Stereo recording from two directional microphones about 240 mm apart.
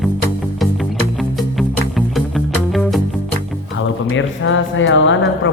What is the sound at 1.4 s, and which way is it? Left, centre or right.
Music, centre.